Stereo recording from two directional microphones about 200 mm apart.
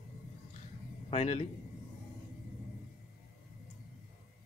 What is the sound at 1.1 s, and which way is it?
Speech, 35° left (ahead or behind).